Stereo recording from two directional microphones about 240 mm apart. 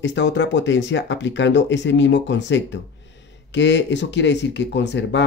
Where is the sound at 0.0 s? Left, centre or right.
Left.